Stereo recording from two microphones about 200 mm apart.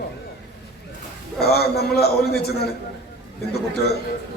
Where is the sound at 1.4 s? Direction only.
55° left (ahead or behind).